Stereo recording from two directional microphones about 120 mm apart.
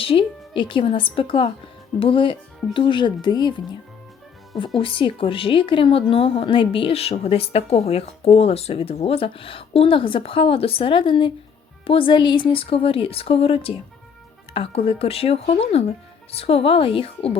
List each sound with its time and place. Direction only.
0.0 s a woman's voice: 50° left (ahead or behind)
4.8 s a woman's voice: 45° left (ahead or behind)